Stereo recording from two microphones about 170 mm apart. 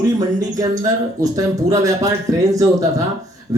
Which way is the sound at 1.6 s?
20° right (ahead or behind).